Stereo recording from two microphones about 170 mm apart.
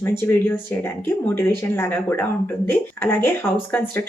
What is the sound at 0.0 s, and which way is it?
A woman's voice, 15° left (ahead or behind).